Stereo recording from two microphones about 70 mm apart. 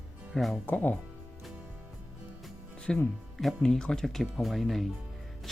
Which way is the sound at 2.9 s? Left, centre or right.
Centre.